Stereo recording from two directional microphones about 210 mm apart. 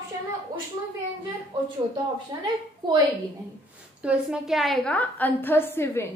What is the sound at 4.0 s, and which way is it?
A woman's voice, 5° right (ahead or behind).